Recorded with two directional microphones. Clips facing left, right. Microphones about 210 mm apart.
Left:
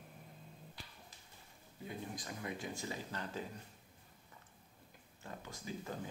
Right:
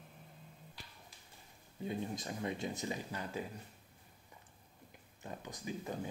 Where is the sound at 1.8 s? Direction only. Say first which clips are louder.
Right 6 dB; 25° right (ahead or behind).